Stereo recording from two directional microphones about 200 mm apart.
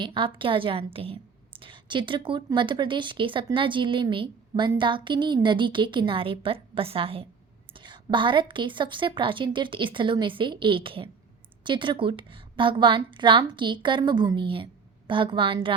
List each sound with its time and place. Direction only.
0.0 s a woman's voice: 25° right (ahead or behind)